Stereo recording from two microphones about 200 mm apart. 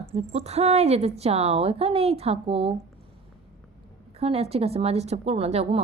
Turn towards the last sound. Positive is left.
turn(degrees=-30)  # may be behind; listen again after turning